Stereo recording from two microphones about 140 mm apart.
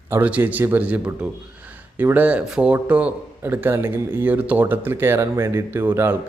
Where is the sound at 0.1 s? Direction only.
10° right (ahead or behind).